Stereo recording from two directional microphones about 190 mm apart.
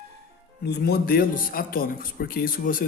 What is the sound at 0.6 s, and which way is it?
Speech, 60° left (ahead or behind).